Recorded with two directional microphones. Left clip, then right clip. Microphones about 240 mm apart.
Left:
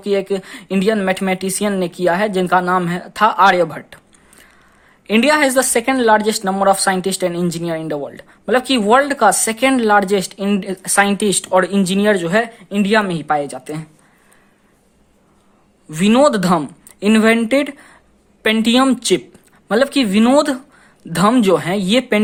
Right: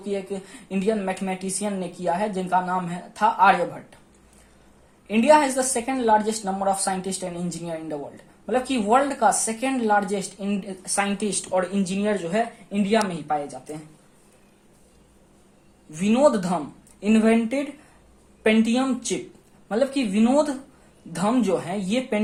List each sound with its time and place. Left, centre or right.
0.0 s a woman's voice: left
5.0 s a woman's voice: left
15.9 s a woman's voice: left